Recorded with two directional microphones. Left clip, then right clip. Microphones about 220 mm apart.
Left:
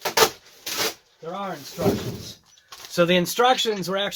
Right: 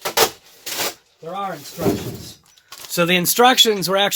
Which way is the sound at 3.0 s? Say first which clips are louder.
Right 4 dB; 45° right (ahead or behind).